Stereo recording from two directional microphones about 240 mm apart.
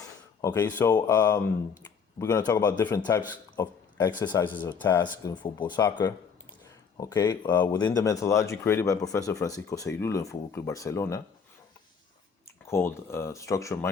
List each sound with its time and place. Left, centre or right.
0.4 s speech: centre
12.7 s speech: centre